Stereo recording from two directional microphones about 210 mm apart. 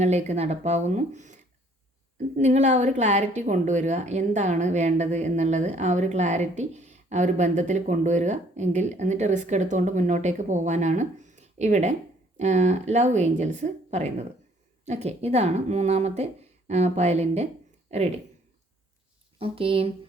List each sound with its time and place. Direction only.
0.0 s a woman's voice: 30° right (ahead or behind)
2.4 s a woman's voice: 35° right (ahead or behind)
19.4 s speech: 25° right (ahead or behind)